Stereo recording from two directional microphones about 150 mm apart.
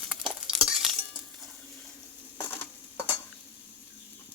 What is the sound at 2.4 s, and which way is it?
Stir, 15° left (ahead or behind).